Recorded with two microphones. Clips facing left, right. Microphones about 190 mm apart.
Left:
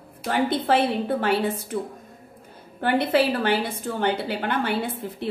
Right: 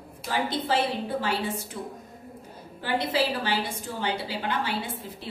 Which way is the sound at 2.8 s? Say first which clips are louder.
Left 6 dB; 60° left (ahead or behind).